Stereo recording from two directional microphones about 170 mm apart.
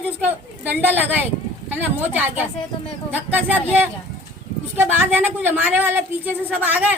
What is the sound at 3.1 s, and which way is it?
A woman's voice, 10° right (ahead or behind).